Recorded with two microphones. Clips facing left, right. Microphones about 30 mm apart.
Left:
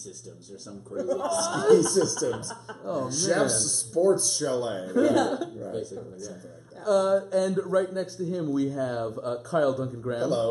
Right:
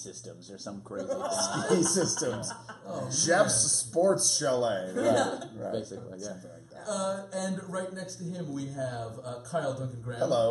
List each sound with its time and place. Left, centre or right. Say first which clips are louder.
0.7 s speech: left 5 dB; centre
6.8 s speech: left 10 dB; centre
10.1 s speech: even; centre